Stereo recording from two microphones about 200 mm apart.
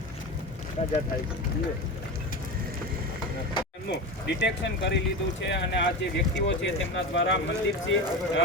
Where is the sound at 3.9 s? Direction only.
60° left (ahead or behind).